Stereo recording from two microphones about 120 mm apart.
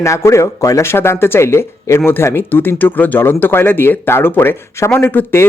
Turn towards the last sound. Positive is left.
turn(degrees=15)  # may be behind; listen again after turning